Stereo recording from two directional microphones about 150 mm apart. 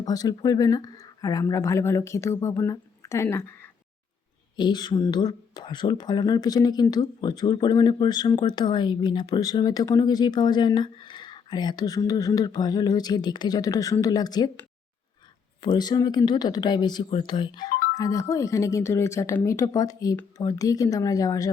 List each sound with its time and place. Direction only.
0.0 s speech: 25° left (ahead or behind)
4.5 s speech: 30° left (ahead or behind)
15.6 s speech: 30° left (ahead or behind)